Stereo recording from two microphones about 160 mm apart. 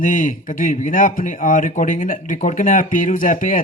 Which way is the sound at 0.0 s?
55° left (ahead or behind).